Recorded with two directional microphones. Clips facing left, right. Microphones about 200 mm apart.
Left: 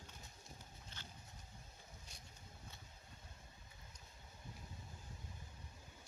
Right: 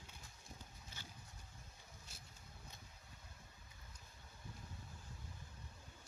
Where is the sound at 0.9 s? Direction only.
10° right (ahead or behind).